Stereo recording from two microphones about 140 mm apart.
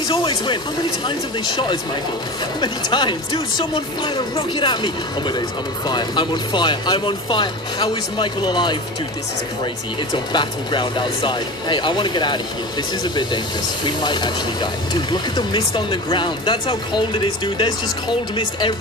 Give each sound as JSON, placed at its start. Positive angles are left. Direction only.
{"t": 0.1, "sound": "speech", "side_deg": 35}
{"t": 10.1, "sound": "speech", "side_deg": 35}